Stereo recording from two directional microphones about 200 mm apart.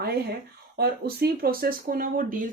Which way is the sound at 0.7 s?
50° right (ahead or behind).